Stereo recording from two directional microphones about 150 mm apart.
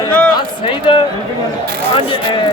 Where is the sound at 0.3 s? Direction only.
35° left (ahead or behind).